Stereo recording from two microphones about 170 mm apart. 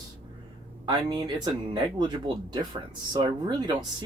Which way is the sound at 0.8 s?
25° right (ahead or behind).